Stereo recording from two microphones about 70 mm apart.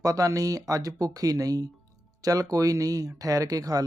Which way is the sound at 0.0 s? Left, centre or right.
Right.